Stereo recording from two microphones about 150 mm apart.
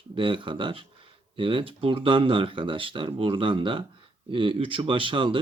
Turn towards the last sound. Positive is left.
turn(degrees=-35)  # may be behind; listen again after turning